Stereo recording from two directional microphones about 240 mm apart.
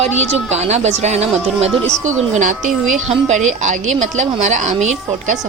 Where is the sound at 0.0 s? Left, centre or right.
Right.